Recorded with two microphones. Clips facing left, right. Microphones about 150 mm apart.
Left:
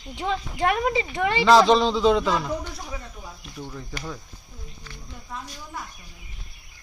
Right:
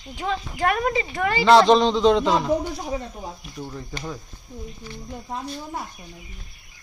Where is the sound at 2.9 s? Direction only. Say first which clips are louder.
Right 8 dB; 35° right (ahead or behind).